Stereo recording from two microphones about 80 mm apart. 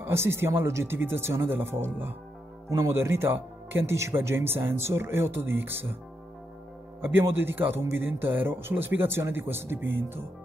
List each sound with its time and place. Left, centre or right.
0.0 s speech: right
7.2 s a man's voice: right